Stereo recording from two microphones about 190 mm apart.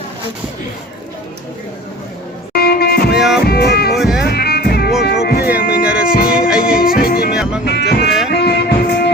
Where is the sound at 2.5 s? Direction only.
55° left (ahead or behind).